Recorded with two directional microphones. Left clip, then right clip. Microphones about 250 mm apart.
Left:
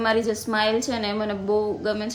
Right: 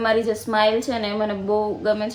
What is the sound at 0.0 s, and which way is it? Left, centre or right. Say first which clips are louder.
A woman's voice: right 2 dB; centre.